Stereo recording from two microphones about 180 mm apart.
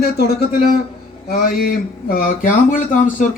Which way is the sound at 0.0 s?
60° left (ahead or behind).